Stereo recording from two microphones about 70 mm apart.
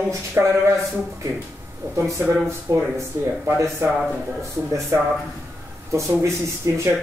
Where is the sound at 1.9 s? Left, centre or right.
Right.